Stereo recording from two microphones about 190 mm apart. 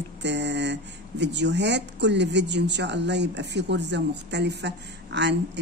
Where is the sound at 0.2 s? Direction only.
65° right (ahead or behind).